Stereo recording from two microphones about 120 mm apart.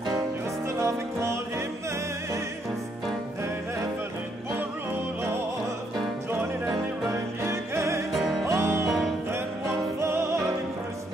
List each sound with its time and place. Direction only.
0.7 s music: 25° right (ahead or behind)
7.4 s music: 25° right (ahead or behind)
8.1 s music: centre (ahead or behind)
8.5 s music: 25° right (ahead or behind)
9.9 s music: 25° right (ahead or behind)